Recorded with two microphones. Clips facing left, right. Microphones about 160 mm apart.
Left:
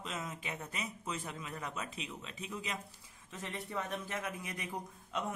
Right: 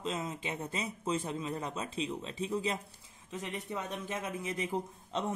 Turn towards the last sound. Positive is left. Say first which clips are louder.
# right 3 dB
turn(degrees=-30)  # may be behind; listen again after turning